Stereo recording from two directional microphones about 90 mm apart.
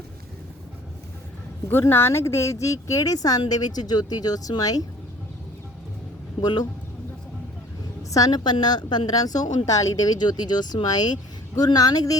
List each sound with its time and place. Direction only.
1.6 s a woman's voice: 25° left (ahead or behind); by 4.8 s 45° left (ahead or behind)
6.4 s a woman's voice: 50° left (ahead or behind)
8.1 s a woman's voice: 45° left (ahead or behind)